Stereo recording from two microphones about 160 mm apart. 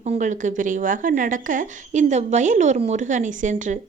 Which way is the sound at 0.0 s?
45° right (ahead or behind).